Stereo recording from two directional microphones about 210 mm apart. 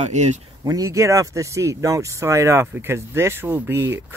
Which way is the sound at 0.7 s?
15° right (ahead or behind).